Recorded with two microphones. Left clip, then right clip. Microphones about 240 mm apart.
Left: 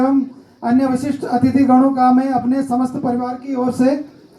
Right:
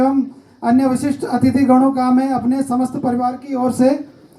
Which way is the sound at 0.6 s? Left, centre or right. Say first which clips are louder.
Right 1 dB; right.